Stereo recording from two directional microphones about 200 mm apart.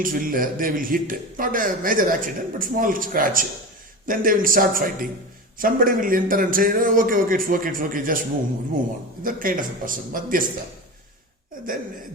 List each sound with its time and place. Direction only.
0.0 s a man's voice: 45° right (ahead or behind)
9.2 s a man's voice: 45° right (ahead or behind)